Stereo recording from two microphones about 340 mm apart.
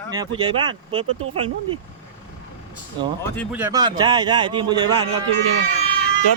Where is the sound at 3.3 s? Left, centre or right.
Centre.